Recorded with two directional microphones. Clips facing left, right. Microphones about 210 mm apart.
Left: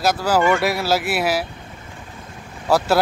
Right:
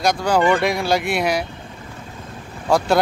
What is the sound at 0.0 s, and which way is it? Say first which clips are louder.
Speech: right 1 dB; 5° left (ahead or behind).